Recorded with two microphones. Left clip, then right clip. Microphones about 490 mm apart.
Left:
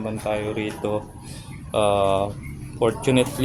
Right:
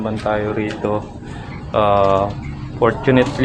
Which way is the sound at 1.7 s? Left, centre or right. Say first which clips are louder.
Right 6 dB; left.